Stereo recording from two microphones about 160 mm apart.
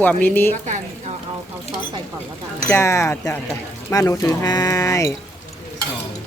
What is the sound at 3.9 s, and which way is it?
Speech, 20° left (ahead or behind).